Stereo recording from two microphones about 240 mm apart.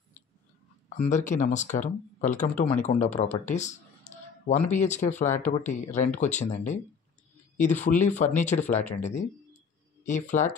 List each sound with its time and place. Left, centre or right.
0.8 s speech: left